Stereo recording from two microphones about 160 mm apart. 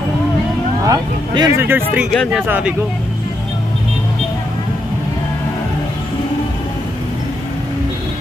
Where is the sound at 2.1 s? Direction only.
Centre (ahead or behind).